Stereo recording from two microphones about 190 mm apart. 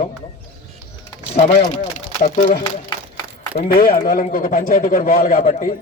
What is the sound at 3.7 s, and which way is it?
A man's voice, 50° left (ahead or behind).